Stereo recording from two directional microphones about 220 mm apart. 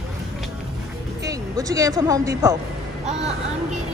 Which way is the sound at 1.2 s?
15° right (ahead or behind).